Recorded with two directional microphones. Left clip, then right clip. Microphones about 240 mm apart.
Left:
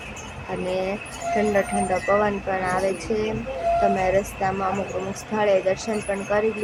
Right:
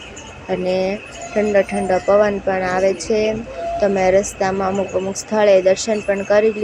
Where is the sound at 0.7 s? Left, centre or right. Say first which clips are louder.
Right 5 dB; centre.